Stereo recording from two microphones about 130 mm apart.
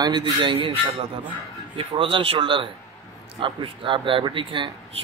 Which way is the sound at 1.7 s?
45° right (ahead or behind).